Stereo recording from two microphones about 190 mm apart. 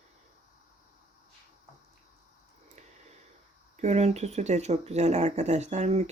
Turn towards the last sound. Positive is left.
turn(degrees=-35)  # may be behind; listen again after turning